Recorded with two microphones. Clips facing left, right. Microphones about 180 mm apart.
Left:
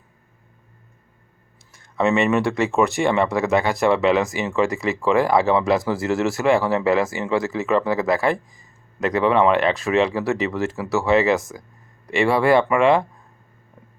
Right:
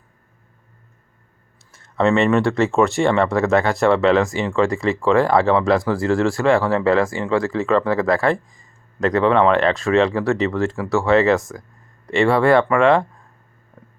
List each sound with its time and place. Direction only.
2.0 s speech: 5° left (ahead or behind)
10.6 s speech: 15° left (ahead or behind)
11.3 s speech: centre (ahead or behind)